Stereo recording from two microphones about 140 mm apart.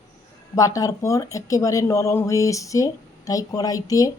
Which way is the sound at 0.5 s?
25° left (ahead or behind).